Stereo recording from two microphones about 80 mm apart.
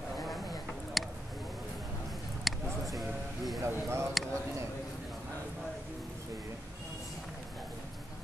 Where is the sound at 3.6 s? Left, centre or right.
Right.